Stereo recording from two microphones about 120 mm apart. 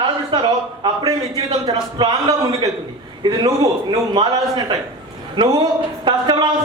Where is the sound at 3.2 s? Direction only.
35° right (ahead or behind).